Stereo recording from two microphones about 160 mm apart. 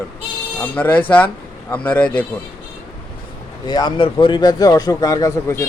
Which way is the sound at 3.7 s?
25° left (ahead or behind).